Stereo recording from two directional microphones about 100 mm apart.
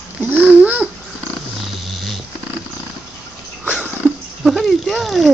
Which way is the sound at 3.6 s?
10° right (ahead or behind).